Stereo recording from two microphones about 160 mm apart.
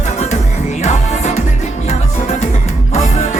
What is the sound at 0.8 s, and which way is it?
Music, 45° left (ahead or behind).